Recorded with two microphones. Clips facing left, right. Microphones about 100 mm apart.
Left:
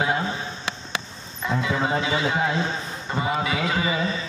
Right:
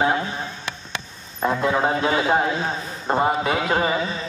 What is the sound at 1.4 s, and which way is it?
A man's voice, 50° right (ahead or behind).